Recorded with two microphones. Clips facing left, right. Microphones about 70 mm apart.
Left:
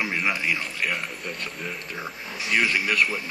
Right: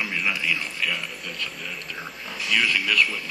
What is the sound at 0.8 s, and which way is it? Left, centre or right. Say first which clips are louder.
Speech: left 1 dB; left.